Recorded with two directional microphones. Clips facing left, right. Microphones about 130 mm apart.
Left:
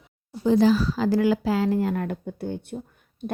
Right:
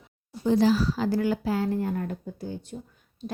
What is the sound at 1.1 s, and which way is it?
Speech, 90° left.